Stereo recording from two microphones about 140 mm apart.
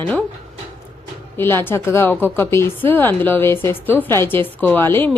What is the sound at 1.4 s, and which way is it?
A woman's voice, 15° left (ahead or behind).